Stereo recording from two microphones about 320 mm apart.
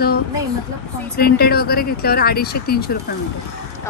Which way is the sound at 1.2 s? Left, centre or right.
Left.